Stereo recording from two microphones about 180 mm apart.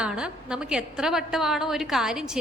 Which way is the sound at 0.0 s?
5° right (ahead or behind).